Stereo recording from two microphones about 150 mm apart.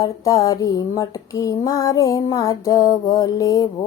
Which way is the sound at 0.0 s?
25° left (ahead or behind).